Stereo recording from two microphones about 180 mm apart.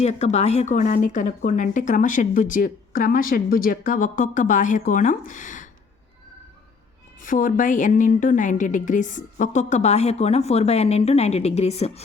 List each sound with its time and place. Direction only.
0.0 s a woman's voice: 40° left (ahead or behind)
7.2 s a woman's voice: 45° left (ahead or behind)